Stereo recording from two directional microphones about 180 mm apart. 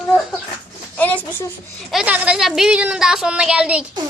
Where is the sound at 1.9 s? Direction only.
5° right (ahead or behind).